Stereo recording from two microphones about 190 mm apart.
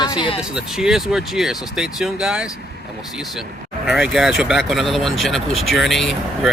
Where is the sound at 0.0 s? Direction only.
25° left (ahead or behind).